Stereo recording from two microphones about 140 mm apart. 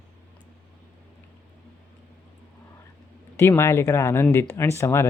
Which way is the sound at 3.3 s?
20° left (ahead or behind).